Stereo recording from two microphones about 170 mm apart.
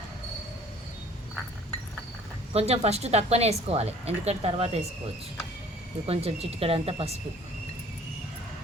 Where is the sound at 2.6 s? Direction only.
40° right (ahead or behind).